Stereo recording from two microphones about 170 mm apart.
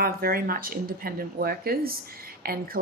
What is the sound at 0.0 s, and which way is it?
A woman's voice, 60° right (ahead or behind).